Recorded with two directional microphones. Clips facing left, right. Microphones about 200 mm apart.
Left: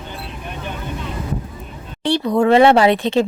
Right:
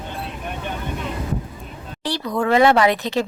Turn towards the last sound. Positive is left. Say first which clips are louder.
# left 4 dB
turn(degrees=25)  # may be behind; listen again after turning